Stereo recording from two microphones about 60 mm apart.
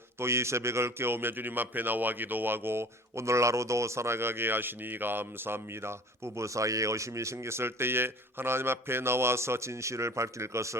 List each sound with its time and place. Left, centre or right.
0.2 s a man's voice: right